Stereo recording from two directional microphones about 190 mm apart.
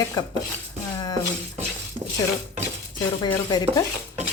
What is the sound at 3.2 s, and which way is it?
Speech, 20° left (ahead or behind).